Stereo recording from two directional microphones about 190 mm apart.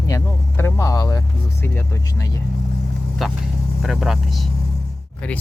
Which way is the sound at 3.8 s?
Centre (ahead or behind).